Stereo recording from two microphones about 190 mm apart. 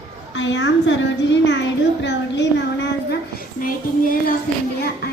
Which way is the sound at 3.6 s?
45° left (ahead or behind).